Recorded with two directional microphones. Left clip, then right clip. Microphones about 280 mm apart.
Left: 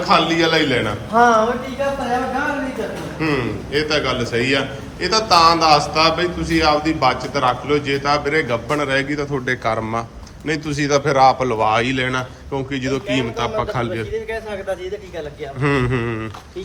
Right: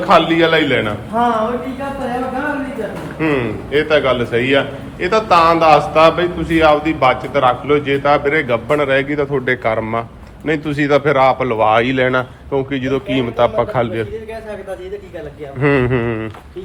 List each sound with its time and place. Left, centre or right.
0.0 s a man's voice: centre
1.1 s speech: left
3.2 s a man's voice: centre
15.6 s a man's voice: centre